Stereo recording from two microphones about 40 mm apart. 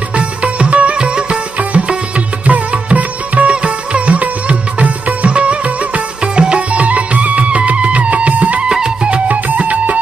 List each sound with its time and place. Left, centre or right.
0.1 s music: right
1.6 s music: right
8.6 s music: right
9.3 s music: right